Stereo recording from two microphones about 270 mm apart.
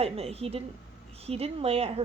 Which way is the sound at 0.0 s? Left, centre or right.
Right.